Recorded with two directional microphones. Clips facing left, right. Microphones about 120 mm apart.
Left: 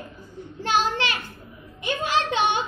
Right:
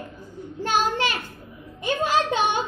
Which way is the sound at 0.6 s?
45° right (ahead or behind).